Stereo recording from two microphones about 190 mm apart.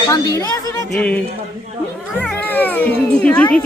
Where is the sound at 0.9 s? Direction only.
5° left (ahead or behind).